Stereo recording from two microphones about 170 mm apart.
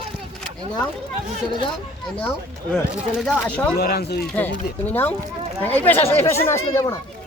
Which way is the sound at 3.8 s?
65° left (ahead or behind).